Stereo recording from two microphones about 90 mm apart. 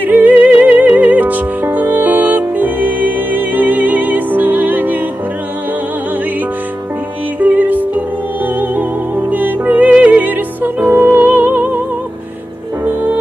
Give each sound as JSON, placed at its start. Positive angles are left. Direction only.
{"t": 0.0, "sound": "music", "side_deg": -20}
{"t": 7.3, "sound": "music", "side_deg": -20}
{"t": 12.8, "sound": "music", "side_deg": -20}